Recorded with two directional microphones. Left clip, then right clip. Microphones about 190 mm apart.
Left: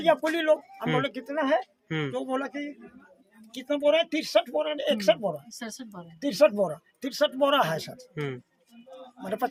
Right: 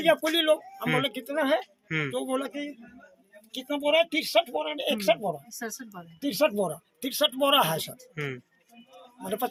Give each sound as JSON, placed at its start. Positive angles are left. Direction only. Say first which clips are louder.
{"t": 0.0, "sound": "speech", "louder": "right 1 dB", "side_deg": -5}
{"t": 3.5, "sound": "speech", "louder": "left 1 dB", "side_deg": 10}
{"t": 5.5, "sound": "speech", "louder": "right 2 dB", "side_deg": 45}
{"t": 6.2, "sound": "speech", "louder": "left 4 dB", "side_deg": 10}
{"t": 6.7, "sound": "speech", "louder": "even", "side_deg": 0}
{"t": 8.1, "sound": "speech", "louder": "left 1 dB", "side_deg": 20}
{"t": 9.2, "sound": "speech", "louder": "left 1 dB", "side_deg": 0}